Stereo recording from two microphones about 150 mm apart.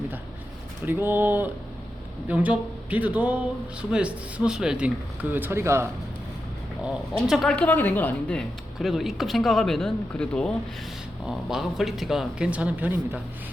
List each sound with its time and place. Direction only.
0.9 s speech: 15° right (ahead or behind)
6.8 s speech: 5° right (ahead or behind)